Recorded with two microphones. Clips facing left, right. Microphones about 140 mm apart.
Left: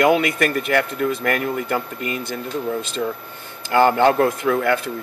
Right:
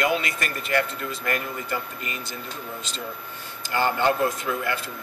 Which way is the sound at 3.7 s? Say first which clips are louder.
Left 8 dB; 60° left (ahead or behind).